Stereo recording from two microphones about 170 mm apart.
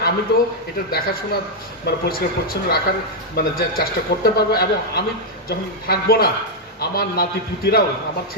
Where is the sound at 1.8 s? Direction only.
65° left (ahead or behind).